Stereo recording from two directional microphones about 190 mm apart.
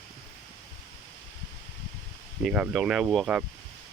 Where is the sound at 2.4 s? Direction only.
5° right (ahead or behind).